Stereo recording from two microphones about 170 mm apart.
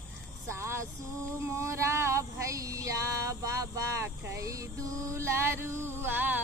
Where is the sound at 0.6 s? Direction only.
15° right (ahead or behind).